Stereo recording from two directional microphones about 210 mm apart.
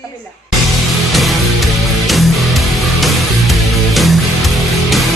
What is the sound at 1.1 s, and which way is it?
Music, centre (ahead or behind).